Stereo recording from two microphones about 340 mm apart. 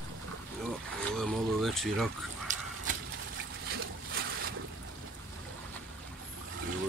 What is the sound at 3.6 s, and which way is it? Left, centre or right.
Splash, right.